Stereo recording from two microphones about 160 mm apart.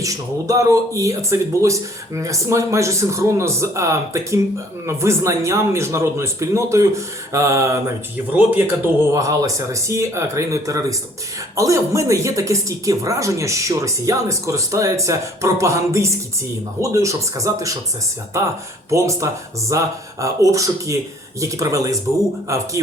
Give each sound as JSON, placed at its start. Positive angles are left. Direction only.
{"t": 0.0, "sound": "speech", "side_deg": -20}
{"t": 9.1, "sound": "speech", "side_deg": -20}